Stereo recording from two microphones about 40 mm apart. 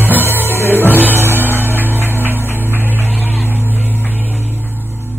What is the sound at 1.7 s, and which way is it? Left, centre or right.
Music, right.